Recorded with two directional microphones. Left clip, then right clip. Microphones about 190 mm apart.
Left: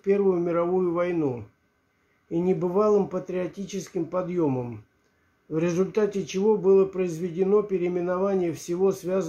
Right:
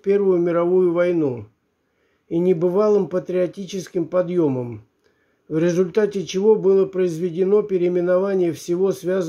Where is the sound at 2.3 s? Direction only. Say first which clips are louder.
Right 6 dB; 25° right (ahead or behind).